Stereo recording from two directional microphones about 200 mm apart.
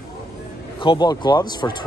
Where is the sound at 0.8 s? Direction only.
25° left (ahead or behind).